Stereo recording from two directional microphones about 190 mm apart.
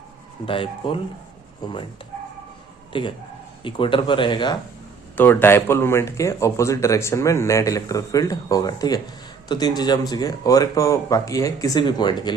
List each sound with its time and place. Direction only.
0.4 s speech: 25° left (ahead or behind)
2.9 s speech: 25° left (ahead or behind)
5.1 s speech: 10° left (ahead or behind)